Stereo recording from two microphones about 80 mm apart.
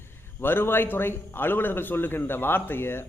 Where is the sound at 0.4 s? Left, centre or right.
Left.